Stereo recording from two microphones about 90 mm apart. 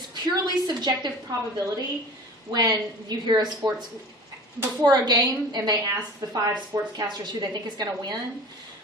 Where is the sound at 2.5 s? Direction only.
50° right (ahead or behind).